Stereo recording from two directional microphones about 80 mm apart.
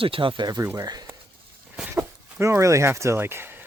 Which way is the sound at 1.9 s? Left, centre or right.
Right.